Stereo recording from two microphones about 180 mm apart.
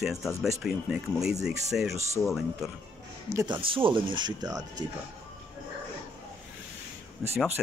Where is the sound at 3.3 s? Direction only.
25° right (ahead or behind).